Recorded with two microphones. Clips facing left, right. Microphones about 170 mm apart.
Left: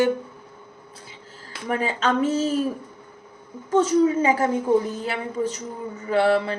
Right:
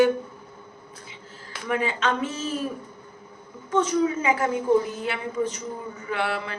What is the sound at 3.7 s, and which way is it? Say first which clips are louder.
Speech: left 4 dB; 40° left (ahead or behind).